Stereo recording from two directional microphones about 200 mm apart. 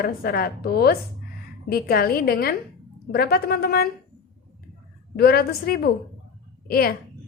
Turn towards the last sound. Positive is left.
turn(degrees=50)  # may be behind; listen again after turning